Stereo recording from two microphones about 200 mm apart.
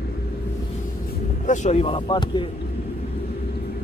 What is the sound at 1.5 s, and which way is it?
Speech, 35° left (ahead or behind).